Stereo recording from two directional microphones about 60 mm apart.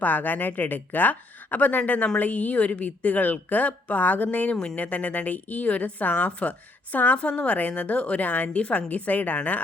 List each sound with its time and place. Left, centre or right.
0.0 s a woman's voice: left
4.5 s a woman's voice: centre